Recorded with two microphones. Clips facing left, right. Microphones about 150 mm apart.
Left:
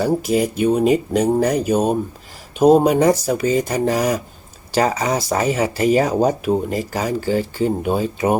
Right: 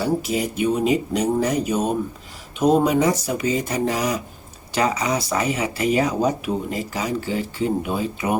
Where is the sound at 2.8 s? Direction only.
55° left (ahead or behind).